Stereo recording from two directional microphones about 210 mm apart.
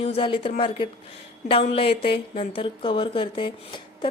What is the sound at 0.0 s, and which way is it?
A woman's voice, 25° left (ahead or behind).